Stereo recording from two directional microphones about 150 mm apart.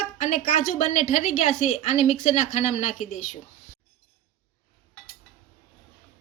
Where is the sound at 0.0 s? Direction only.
55° left (ahead or behind).